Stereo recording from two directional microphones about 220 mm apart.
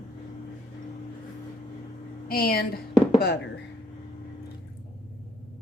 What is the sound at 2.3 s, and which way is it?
Speech, 45° left (ahead or behind).